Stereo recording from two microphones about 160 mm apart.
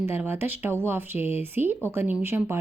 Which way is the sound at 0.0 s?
15° right (ahead or behind).